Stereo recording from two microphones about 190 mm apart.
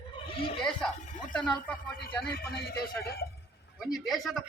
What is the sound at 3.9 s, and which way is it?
Speech, centre (ahead or behind).